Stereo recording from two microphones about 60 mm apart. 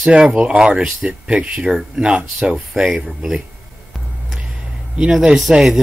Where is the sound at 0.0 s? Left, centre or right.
Centre.